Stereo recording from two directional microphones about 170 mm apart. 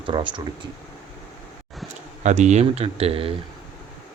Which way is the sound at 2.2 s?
45° right (ahead or behind).